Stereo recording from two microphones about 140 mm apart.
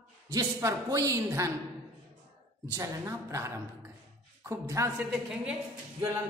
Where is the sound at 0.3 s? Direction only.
25° right (ahead or behind).